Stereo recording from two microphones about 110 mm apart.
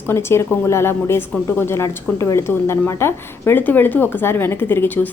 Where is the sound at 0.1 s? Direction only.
25° left (ahead or behind).